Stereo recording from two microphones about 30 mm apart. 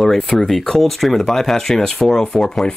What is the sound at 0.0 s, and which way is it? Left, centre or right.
Speech, centre.